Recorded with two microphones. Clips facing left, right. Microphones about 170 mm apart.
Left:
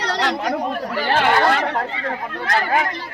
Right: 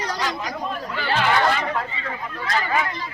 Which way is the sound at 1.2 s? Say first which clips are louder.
Left 2 dB; 60° left (ahead or behind).